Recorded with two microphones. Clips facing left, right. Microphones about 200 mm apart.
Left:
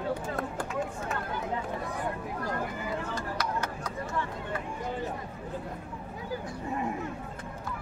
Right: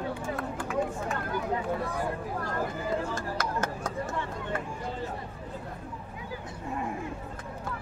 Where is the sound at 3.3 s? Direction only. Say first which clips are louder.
Right 1 dB; 50° right (ahead or behind).